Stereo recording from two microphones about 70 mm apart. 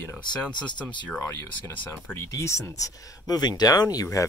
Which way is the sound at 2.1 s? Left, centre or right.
Left.